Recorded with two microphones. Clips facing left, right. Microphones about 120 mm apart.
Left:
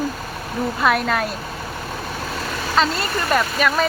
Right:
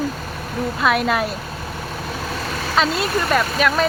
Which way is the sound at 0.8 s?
5° right (ahead or behind).